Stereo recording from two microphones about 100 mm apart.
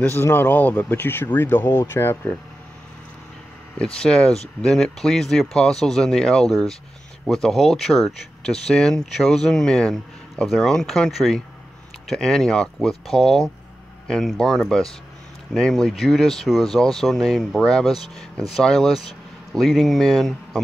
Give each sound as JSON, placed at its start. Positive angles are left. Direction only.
{"t": 0.1, "sound": "speech", "side_deg": 20}
{"t": 3.7, "sound": "speech", "side_deg": 10}